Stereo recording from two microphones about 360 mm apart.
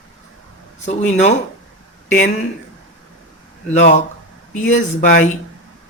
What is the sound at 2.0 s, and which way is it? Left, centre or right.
Speech, left.